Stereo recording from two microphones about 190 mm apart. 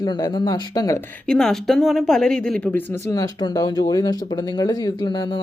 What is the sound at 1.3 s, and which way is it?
A woman's voice, 5° left (ahead or behind).